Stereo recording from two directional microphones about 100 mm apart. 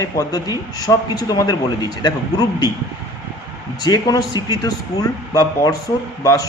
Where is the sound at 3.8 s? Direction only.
40° left (ahead or behind).